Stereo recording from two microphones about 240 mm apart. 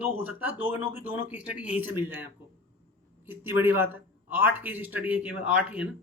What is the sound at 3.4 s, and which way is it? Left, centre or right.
A man's voice, centre.